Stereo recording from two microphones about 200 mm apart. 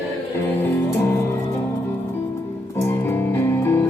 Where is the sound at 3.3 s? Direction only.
10° left (ahead or behind).